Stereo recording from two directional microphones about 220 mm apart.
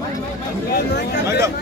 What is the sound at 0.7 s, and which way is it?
Speech, 50° left (ahead or behind).